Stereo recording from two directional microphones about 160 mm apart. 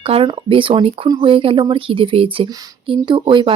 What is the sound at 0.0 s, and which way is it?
Speech, 35° right (ahead or behind).